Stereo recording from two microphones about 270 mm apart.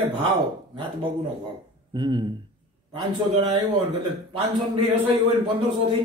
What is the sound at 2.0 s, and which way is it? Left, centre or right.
Speech, centre.